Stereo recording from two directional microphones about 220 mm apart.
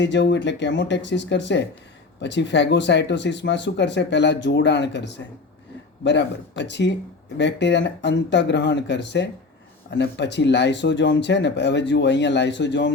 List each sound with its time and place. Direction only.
0.0 s speech: 55° left (ahead or behind)